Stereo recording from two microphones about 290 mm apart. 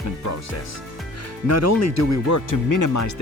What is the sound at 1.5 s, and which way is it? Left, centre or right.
Speech, left.